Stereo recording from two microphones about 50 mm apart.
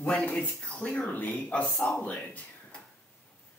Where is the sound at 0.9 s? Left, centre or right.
Left.